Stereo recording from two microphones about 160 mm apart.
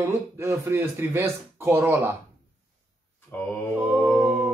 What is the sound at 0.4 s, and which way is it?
Speech, 15° right (ahead or behind).